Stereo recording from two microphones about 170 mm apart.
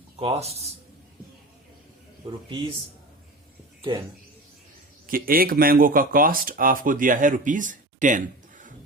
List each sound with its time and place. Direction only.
0.2 s a man's voice: 35° right (ahead or behind)
2.2 s a man's voice: 30° right (ahead or behind)
5.0 s speech: 55° right (ahead or behind)